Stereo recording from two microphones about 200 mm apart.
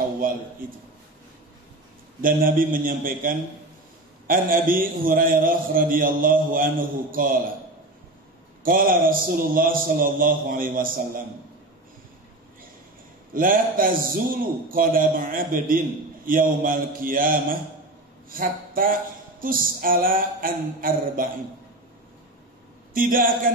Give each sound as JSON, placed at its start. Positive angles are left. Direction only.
{"t": 0.2, "sound": "a sound", "side_deg": -45}
{"t": 2.2, "sound": "a man's voice", "side_deg": -45}
{"t": 8.6, "sound": "a man's voice", "side_deg": -45}
{"t": 13.3, "sound": "a man's voice", "side_deg": -45}
{"t": 22.9, "sound": "a man's voice", "side_deg": -45}